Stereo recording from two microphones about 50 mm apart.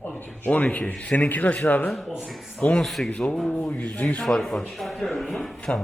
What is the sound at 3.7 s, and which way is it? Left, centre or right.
Speech, left.